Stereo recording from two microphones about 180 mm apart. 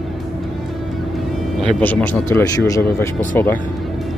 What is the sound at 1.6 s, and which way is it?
Speech, 5° left (ahead or behind).